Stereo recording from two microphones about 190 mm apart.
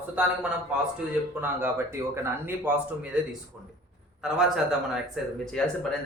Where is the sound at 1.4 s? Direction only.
10° right (ahead or behind).